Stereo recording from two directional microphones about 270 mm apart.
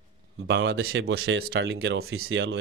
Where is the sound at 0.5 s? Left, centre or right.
Right.